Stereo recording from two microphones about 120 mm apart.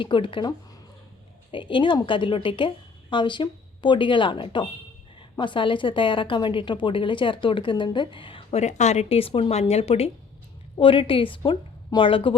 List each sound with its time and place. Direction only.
0.0 s a woman's voice: 45° left (ahead or behind)
8.6 s speech: 70° left (ahead or behind)
10.8 s a woman's voice: 45° left (ahead or behind)